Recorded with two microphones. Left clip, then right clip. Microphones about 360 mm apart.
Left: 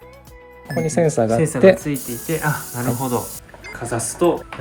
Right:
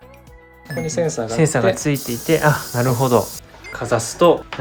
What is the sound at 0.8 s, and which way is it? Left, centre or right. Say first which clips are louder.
Speech: left 3 dB; centre.